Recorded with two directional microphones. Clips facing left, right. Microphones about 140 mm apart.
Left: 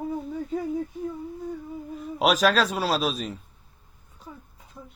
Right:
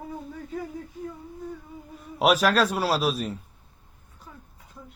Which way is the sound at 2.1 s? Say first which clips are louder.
Even; 5° right (ahead or behind).